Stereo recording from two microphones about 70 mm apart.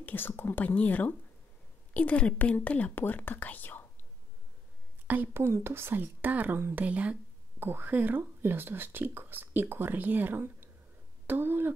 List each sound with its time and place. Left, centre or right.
0.0 s speech: left
5.0 s speech: right